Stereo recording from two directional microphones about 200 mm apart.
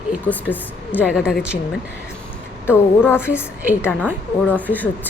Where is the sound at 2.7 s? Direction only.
10° left (ahead or behind).